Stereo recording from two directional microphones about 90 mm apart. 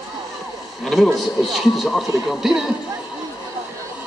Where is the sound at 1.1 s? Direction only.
Centre (ahead or behind).